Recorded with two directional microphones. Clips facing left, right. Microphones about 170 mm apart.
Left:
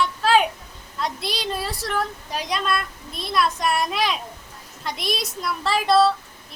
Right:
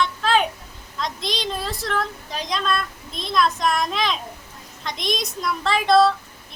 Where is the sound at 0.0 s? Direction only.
5° left (ahead or behind).